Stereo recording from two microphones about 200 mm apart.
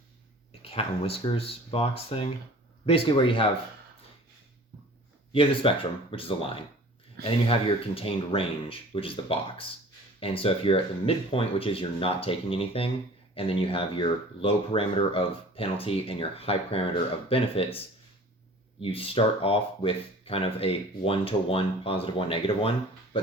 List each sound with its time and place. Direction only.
0.6 s speech: 30° left (ahead or behind)
5.3 s speech: 25° left (ahead or behind)
7.9 s speech: 25° left (ahead or behind)